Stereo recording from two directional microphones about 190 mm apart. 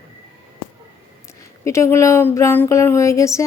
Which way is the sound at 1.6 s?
15° left (ahead or behind).